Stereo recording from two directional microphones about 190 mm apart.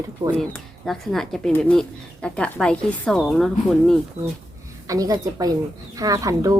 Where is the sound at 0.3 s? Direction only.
Centre (ahead or behind).